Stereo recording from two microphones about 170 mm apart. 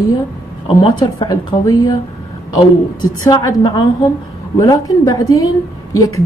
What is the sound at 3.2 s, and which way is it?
Speech, 25° left (ahead or behind).